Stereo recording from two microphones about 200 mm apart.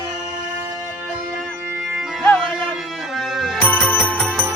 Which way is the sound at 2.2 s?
5° left (ahead or behind).